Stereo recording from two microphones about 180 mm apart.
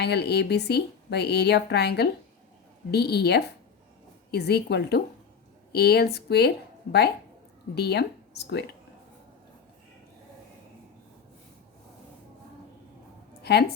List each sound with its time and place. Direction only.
0.0 s a woman's voice: 65° left (ahead or behind)
7.8 s speech: 65° left (ahead or behind)
13.4 s speech: 65° left (ahead or behind)